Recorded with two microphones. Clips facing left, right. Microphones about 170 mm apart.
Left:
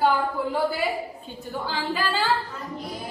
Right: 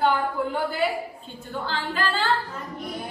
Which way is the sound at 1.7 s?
15° left (ahead or behind).